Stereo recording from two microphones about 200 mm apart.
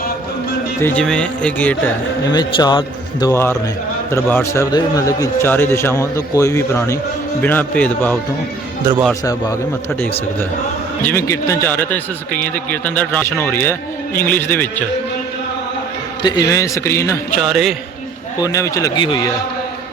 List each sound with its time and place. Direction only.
0.8 s speech: 10° left (ahead or behind)
2.3 s a man's voice: 20° left (ahead or behind)
11.0 s a man's voice: 10° left (ahead or behind)
16.2 s a man's voice: 20° left (ahead or behind)
17.4 s speech: centre (ahead or behind)
18.4 s a man's voice: 15° left (ahead or behind)